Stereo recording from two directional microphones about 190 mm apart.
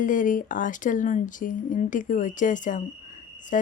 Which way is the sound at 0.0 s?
45° left (ahead or behind).